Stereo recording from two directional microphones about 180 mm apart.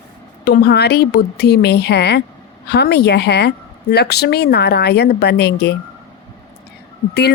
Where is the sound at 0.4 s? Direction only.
60° left (ahead or behind).